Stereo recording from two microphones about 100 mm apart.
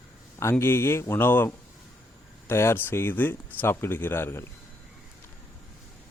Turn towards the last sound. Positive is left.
turn(degrees=25)  # may be behind; listen again after turning